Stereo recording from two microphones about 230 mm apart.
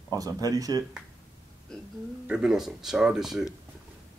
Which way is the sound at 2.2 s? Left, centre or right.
Centre.